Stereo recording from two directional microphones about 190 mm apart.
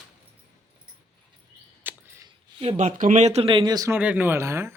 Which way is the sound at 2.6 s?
35° right (ahead or behind).